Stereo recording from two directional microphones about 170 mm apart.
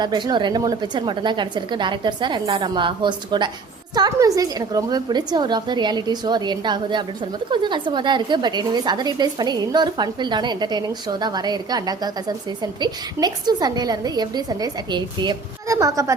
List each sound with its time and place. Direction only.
0.0 s a woman's voice: 25° right (ahead or behind)